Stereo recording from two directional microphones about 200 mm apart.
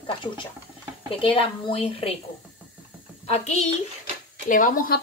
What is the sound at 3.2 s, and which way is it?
Speech, 35° left (ahead or behind).